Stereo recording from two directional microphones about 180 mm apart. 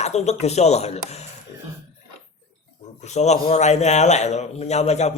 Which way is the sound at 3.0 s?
40° left (ahead or behind).